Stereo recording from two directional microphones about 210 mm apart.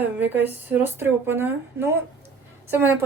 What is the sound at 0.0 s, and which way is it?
A woman's voice, 10° right (ahead or behind).